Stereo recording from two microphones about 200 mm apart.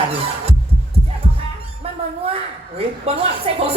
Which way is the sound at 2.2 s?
30° right (ahead or behind).